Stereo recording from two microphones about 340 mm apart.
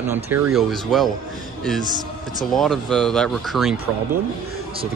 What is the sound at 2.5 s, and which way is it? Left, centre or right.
Speech, centre.